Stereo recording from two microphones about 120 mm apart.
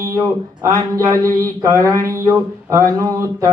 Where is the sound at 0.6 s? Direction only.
25° right (ahead or behind).